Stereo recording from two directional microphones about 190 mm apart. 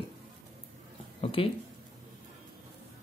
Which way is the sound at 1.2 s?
30° left (ahead or behind).